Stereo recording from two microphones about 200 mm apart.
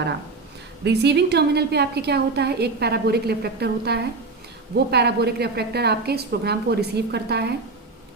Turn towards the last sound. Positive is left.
turn(degrees=-55)  # may be behind; listen again after turning